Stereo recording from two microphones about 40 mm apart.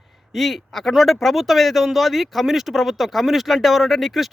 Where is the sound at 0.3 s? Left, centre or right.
Centre.